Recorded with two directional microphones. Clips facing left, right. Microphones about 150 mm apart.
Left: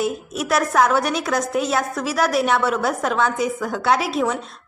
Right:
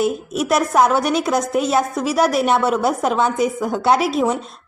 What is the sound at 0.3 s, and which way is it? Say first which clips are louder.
A woman's voice: right 2 dB; 20° right (ahead or behind).